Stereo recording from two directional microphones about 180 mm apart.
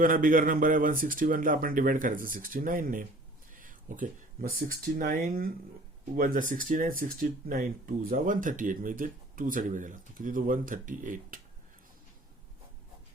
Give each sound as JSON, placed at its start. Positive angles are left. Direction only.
{"t": 0.0, "sound": "speech", "side_deg": -50}
{"t": 3.5, "sound": "a sound", "side_deg": -50}
{"t": 4.9, "sound": "speech", "side_deg": -50}